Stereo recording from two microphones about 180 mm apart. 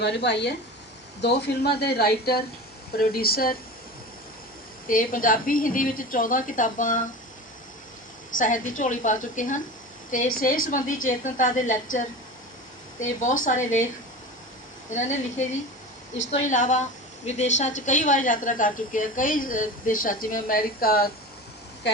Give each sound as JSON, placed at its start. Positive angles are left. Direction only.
{"t": 0.0, "sound": "speech", "side_deg": 70}
{"t": 4.9, "sound": "a woman's voice", "side_deg": 50}
{"t": 8.4, "sound": "a woman's voice", "side_deg": 45}
{"t": 14.8, "sound": "a woman's voice", "side_deg": 40}
{"t": 21.8, "sound": "speech", "side_deg": 70}